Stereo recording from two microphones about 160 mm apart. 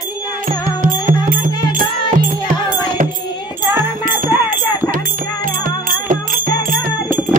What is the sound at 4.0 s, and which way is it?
Music, 60° right (ahead or behind).